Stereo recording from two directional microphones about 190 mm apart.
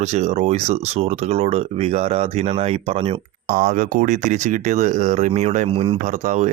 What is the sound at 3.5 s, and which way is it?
Speech, 45° right (ahead or behind).